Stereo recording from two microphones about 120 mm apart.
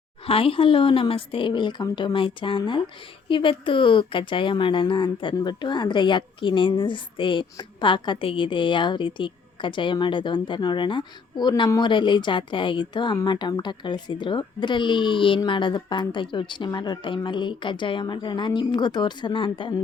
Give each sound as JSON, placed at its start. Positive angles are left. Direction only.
{"t": 0.3, "sound": "a woman's voice", "side_deg": 50}